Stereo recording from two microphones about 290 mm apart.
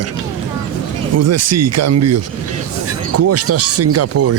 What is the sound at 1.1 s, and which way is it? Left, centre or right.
Speech, right.